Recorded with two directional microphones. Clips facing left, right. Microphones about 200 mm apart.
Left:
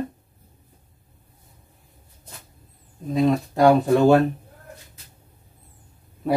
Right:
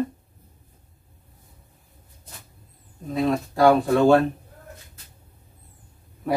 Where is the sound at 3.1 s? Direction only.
20° left (ahead or behind).